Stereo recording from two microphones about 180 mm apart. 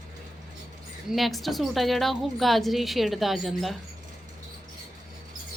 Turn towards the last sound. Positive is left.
turn(degrees=0)  # may be behind; listen again after turning